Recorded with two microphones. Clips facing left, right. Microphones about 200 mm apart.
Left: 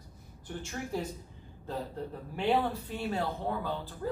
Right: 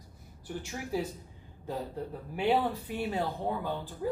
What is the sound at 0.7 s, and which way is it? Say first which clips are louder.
Speech: right 2 dB; 10° right (ahead or behind).